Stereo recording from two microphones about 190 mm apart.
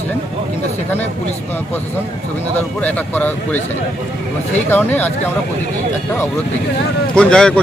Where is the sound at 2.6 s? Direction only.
10° left (ahead or behind).